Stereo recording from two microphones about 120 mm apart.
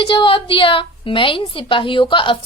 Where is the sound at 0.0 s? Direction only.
45° left (ahead or behind).